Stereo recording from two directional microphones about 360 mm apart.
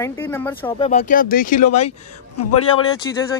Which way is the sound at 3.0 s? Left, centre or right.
Centre.